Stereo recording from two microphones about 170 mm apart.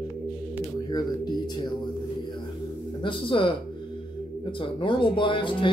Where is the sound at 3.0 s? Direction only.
30° left (ahead or behind).